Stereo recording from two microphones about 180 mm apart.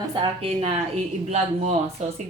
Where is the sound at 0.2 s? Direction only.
30° right (ahead or behind).